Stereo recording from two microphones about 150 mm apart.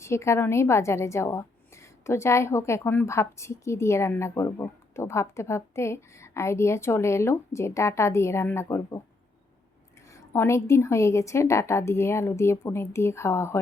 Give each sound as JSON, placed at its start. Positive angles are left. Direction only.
{"t": 0.0, "sound": "a woman's voice", "side_deg": 20}
{"t": 10.1, "sound": "a woman's voice", "side_deg": 20}